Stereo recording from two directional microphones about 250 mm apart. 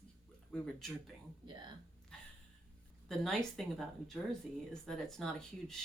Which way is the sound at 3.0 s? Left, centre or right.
Centre.